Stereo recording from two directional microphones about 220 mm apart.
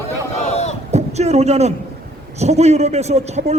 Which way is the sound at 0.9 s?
30° right (ahead or behind).